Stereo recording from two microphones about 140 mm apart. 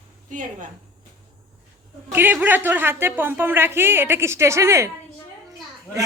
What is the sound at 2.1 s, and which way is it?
Speech, 15° right (ahead or behind).